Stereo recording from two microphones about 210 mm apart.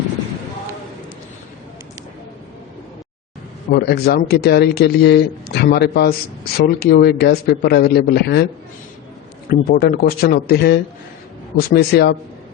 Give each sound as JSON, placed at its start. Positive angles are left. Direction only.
{"t": 3.7, "sound": "speech", "side_deg": 50}
{"t": 9.5, "sound": "speech", "side_deg": 45}